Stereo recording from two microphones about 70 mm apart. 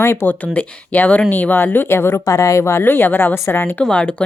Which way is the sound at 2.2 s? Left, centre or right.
Left.